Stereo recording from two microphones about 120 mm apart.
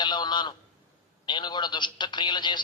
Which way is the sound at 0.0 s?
40° left (ahead or behind).